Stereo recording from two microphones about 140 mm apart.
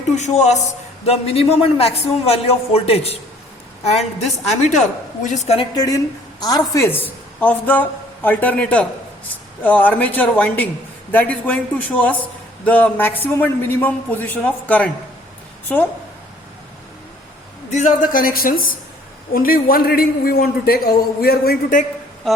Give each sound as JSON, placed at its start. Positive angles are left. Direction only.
{"t": 0.1, "sound": "a woman's voice", "side_deg": 55}
{"t": 1.0, "sound": "a man's voice", "side_deg": 45}
{"t": 4.2, "sound": "a woman's voice", "side_deg": 55}
{"t": 5.7, "sound": "a woman's voice", "side_deg": 25}
{"t": 17.7, "sound": "a man's voice", "side_deg": 65}